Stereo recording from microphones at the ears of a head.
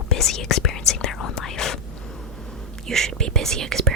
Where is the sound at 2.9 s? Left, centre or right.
Right.